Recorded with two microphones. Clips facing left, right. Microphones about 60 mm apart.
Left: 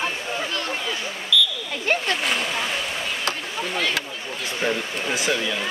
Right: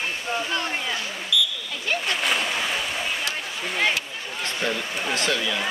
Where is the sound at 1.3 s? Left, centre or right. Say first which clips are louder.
Left 3 dB; centre.